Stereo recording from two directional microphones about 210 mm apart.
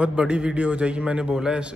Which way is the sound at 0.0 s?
5° right (ahead or behind).